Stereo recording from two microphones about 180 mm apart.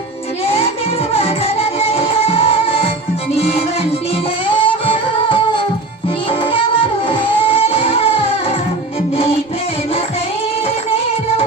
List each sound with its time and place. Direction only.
0.4 s music: 35° left (ahead or behind)
4.4 s music: 30° left (ahead or behind)
7.1 s music: 30° left (ahead or behind)